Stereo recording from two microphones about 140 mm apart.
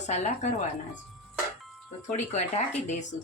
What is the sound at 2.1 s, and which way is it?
Speech, 55° left (ahead or behind).